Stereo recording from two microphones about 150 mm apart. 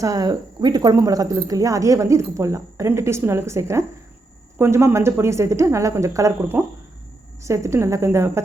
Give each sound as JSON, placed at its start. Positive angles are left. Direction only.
{"t": 0.0, "sound": "speech", "side_deg": -25}